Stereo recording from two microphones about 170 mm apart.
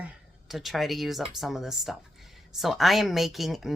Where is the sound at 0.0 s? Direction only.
Centre (ahead or behind).